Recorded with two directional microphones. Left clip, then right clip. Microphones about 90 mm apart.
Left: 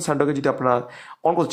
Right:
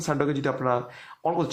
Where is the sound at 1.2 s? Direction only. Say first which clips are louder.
Left 6 dB; 50° left (ahead or behind).